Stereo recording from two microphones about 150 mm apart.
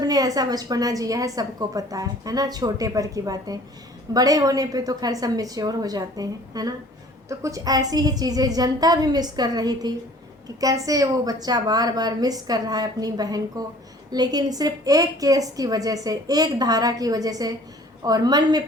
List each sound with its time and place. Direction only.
0.0 s a woman's voice: 25° right (ahead or behind)